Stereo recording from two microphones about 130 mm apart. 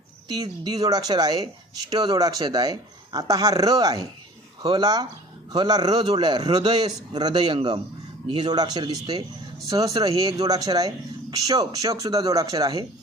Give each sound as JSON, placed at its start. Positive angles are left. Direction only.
{"t": 0.3, "sound": "a man's voice", "side_deg": -30}